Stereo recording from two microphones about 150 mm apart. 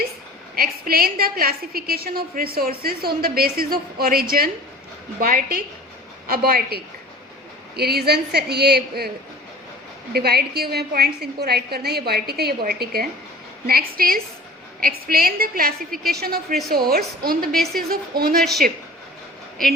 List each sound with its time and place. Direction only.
0.5 s a woman's voice: 80° right
10.1 s a woman's voice: 90° right
13.7 s a woman's voice: 80° right
16.0 s a woman's voice: 90° right